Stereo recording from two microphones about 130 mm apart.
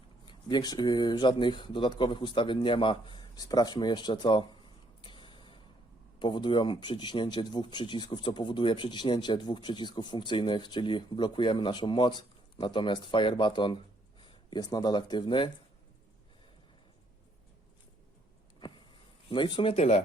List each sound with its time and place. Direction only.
0.3 s speech: 35° left (ahead or behind)
5.0 s a sound: 35° left (ahead or behind)
6.1 s speech: 35° left (ahead or behind)
19.3 s speech: 40° left (ahead or behind)